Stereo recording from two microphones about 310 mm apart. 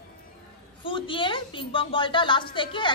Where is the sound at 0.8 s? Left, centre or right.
Centre.